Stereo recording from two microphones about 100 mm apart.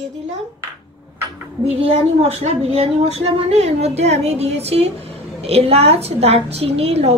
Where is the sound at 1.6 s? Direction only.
90° right.